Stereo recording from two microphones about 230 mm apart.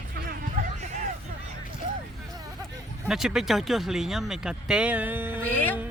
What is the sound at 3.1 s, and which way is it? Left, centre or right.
Speech, centre.